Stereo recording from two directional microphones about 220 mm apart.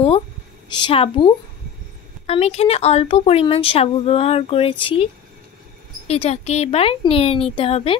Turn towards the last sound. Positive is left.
turn(degrees=25)  # may be behind; listen again after turning